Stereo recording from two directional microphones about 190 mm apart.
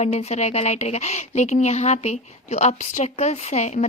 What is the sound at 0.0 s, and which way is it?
A woman's voice, 35° left (ahead or behind).